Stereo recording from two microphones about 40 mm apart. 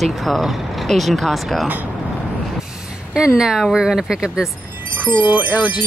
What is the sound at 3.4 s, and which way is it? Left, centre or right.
Speech, centre.